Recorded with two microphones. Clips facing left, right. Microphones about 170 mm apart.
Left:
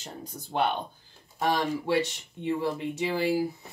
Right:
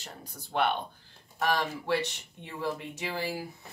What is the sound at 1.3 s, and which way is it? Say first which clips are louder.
Speech: left 3 dB; 15° left (ahead or behind).